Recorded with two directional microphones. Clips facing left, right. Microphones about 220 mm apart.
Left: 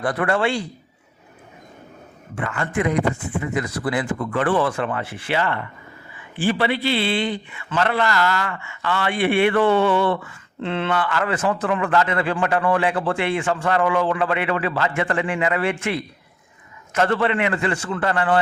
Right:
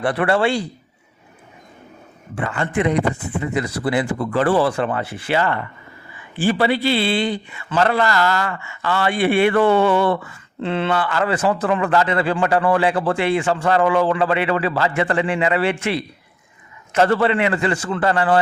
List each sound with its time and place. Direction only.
0.0 s a man's voice: 30° right (ahead or behind)
2.3 s a man's voice: 30° right (ahead or behind)